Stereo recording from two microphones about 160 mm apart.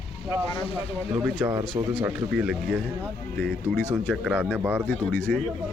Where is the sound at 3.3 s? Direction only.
15° left (ahead or behind).